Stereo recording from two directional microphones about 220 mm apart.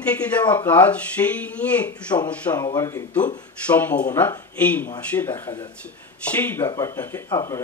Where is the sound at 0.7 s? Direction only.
5° left (ahead or behind).